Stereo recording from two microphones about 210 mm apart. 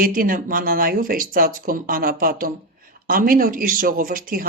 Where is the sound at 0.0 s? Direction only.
40° right (ahead or behind).